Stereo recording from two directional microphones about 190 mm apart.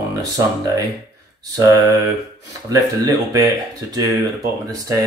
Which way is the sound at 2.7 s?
15° right (ahead or behind).